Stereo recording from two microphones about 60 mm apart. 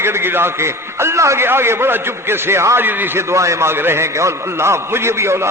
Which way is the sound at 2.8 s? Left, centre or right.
Right.